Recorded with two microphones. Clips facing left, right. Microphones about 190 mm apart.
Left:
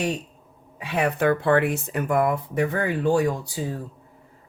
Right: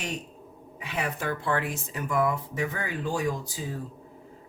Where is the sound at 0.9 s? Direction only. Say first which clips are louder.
Left 9 dB; 60° left (ahead or behind).